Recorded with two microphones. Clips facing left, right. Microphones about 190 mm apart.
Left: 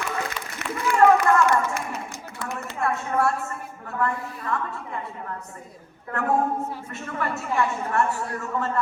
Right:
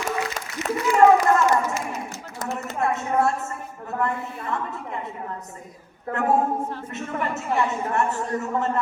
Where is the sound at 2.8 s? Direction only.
20° right (ahead or behind).